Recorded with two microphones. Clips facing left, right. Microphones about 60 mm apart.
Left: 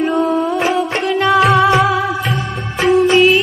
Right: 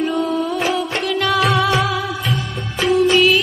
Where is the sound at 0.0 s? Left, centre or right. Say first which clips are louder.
Left 4 dB; left.